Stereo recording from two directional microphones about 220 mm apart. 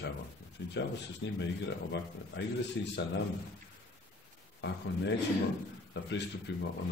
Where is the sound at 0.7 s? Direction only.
50° left (ahead or behind).